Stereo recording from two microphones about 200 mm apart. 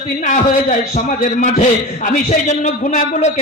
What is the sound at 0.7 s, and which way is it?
A man's voice, 35° left (ahead or behind).